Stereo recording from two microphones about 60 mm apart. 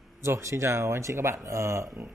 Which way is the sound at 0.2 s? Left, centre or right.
Right.